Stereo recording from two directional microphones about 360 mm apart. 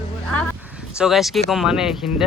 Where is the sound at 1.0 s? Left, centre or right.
Centre.